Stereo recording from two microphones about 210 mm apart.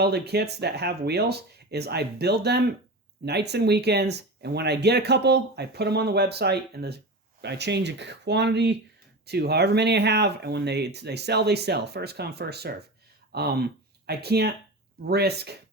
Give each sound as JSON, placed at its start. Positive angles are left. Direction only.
{"t": 0.0, "sound": "speech", "side_deg": -50}